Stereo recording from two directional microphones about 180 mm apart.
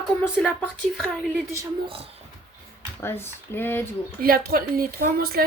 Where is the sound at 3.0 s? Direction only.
15° left (ahead or behind).